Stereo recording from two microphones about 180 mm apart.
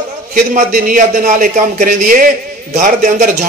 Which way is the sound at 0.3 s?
45° right (ahead or behind).